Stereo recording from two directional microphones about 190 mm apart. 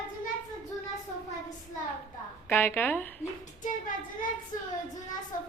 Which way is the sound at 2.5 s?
10° left (ahead or behind).